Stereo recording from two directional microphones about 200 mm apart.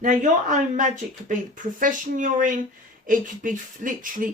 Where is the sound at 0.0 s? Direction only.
40° right (ahead or behind).